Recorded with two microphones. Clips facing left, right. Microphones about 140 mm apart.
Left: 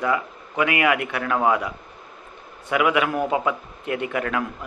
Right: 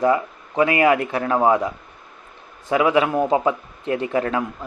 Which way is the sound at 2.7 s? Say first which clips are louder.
Right 3 dB; 30° right (ahead or behind).